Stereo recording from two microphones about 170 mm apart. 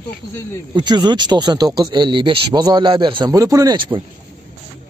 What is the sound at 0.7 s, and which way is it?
Speech, 25° right (ahead or behind).